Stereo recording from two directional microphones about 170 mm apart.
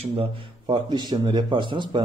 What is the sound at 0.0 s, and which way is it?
A man's voice, 35° right (ahead or behind).